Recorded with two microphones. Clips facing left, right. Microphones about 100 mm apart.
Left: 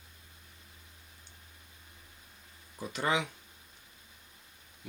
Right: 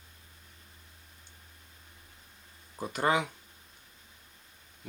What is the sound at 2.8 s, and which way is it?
Speech, 45° right (ahead or behind).